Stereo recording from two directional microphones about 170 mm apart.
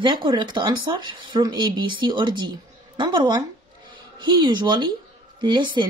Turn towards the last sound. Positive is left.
turn(degrees=-30)  # may be behind; listen again after turning